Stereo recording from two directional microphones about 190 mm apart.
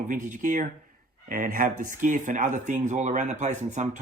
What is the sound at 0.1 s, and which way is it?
Speech, 40° right (ahead or behind).